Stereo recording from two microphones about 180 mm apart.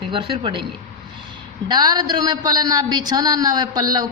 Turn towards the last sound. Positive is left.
turn(degrees=-20)  # may be behind; listen again after turning